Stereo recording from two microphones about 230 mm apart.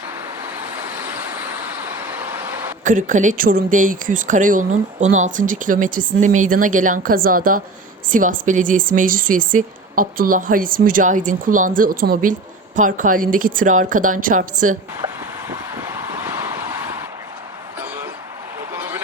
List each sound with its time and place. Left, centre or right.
2.1 s vehicle: centre
2.8 s speech: right
15.0 s vehicle: centre
18.7 s a sound: centre